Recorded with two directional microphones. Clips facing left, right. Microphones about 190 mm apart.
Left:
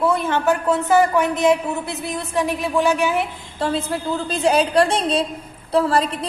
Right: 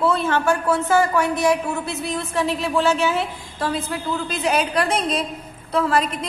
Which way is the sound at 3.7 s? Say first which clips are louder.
Left 2 dB; 30° left (ahead or behind).